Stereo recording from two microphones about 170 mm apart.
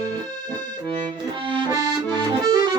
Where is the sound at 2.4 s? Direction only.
20° right (ahead or behind).